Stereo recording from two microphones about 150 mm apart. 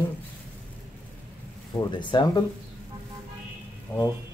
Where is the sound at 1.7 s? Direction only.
30° left (ahead or behind).